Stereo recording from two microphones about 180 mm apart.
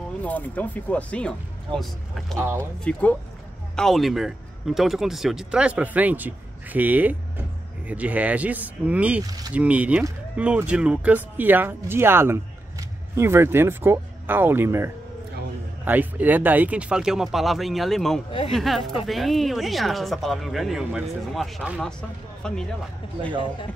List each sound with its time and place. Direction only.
0.2 s speech: 10° left (ahead or behind)
2.3 s speech: 15° right (ahead or behind)
2.8 s speech: 5° left (ahead or behind)
9.2 s speech: 20° right (ahead or behind)
9.5 s speech: 5° right (ahead or behind)